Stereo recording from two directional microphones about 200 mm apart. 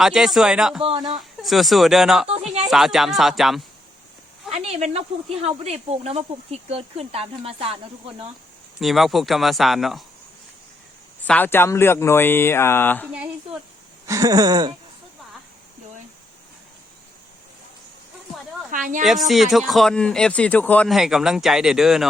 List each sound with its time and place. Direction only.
0.0 s speech: centre (ahead or behind)
0.8 s speech: 25° right (ahead or behind)
1.4 s speech: centre (ahead or behind)
2.2 s a sound: 30° right (ahead or behind)
2.6 s speech: centre (ahead or behind)
4.5 s speech: 35° right (ahead or behind)
8.8 s speech: centre (ahead or behind)
11.3 s speech: 10° left (ahead or behind)
14.1 s speech: 15° right (ahead or behind)
18.7 s speech: 40° right (ahead or behind)
19.3 s speech: centre (ahead or behind)